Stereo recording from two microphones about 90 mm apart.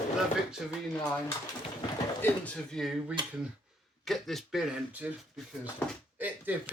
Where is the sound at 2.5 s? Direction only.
5° left (ahead or behind).